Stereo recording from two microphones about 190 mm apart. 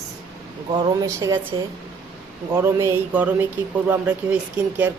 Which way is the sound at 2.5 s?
15° right (ahead or behind).